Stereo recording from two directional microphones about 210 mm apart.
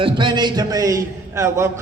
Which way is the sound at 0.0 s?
20° right (ahead or behind).